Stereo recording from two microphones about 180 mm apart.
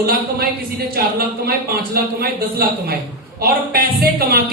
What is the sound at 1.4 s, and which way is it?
Speech, 60° right (ahead or behind).